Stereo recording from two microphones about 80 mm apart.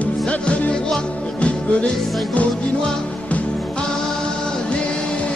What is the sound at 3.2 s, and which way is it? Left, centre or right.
Music, centre.